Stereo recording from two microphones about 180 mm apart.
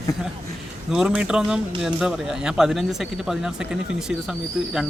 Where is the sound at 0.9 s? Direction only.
5° right (ahead or behind).